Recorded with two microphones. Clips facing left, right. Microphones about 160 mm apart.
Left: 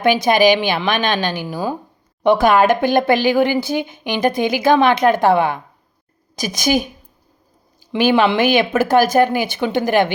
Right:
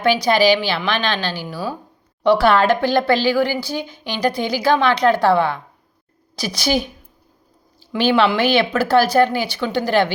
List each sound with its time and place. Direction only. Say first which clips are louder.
0.0 s a woman's voice: left 2 dB; 20° left (ahead or behind)
7.9 s a woman's voice: left 2 dB; 15° left (ahead or behind)